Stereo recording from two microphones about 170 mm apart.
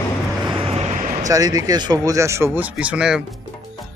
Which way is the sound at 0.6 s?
35° right (ahead or behind).